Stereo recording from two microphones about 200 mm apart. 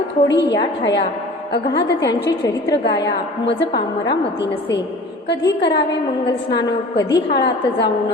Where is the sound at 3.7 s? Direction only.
20° left (ahead or behind).